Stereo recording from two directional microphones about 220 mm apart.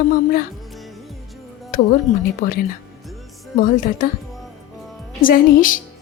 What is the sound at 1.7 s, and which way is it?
Speech, 40° left (ahead or behind).